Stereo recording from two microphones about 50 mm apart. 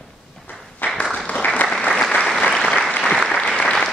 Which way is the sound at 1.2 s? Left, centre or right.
Left.